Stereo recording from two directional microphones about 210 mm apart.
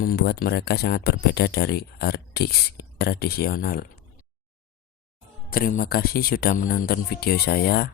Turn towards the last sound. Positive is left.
turn(degrees=45)  # may be behind; listen again after turning